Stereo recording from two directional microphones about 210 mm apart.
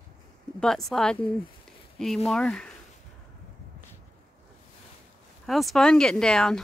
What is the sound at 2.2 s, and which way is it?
Speech, 5° left (ahead or behind).